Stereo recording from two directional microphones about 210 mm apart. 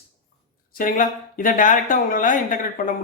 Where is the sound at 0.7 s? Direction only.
40° left (ahead or behind).